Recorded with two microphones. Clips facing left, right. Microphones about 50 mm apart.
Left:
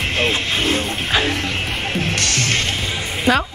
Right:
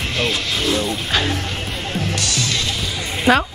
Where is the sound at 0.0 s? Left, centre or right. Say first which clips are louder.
Left 2 dB; left.